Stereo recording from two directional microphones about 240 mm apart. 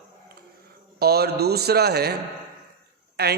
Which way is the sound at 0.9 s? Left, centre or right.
Right.